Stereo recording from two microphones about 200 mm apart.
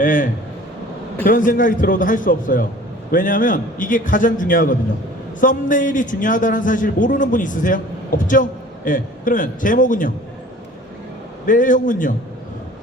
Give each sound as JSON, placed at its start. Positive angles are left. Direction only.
{"t": 0.0, "sound": "a man's voice", "side_deg": 40}
{"t": 11.4, "sound": "a man's voice", "side_deg": 40}